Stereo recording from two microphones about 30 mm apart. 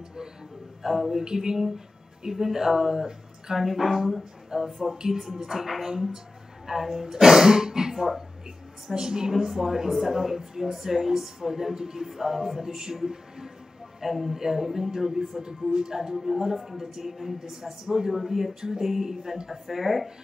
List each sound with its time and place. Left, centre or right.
0.8 s a woman's voice: centre
1.2 s a woman's voice: right; by 4.0 s centre
4.5 s a woman's voice: right
5.1 s a woman's voice: centre
9.3 s a woman's voice: centre
16.2 s a woman's voice: centre
18.9 s a woman's voice: centre